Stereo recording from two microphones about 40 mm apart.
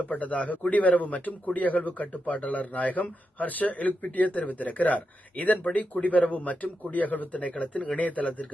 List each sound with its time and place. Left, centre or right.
0.0 s speech: left